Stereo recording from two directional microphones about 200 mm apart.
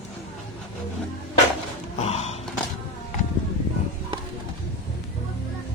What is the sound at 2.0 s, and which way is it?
Snort, 35° left (ahead or behind).